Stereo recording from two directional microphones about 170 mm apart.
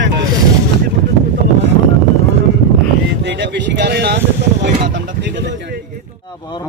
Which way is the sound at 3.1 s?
90° right.